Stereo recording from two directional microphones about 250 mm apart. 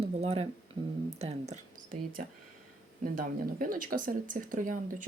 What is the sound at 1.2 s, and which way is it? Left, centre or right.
Speech, right.